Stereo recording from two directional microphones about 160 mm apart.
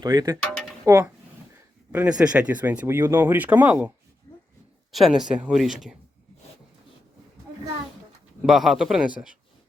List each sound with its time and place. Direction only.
0.0 s speech: 25° right (ahead or behind)
1.9 s speech: 5° right (ahead or behind)
8.4 s speech: centre (ahead or behind)